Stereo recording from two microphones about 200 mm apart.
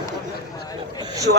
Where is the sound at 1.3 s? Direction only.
60° right (ahead or behind).